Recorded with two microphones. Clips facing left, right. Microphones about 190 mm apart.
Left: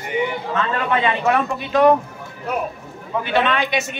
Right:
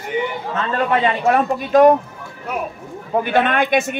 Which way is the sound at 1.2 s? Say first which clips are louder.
Right 3 dB; 45° right (ahead or behind).